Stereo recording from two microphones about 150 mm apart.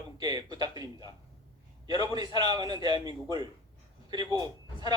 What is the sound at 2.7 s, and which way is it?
Speech, 35° left (ahead or behind).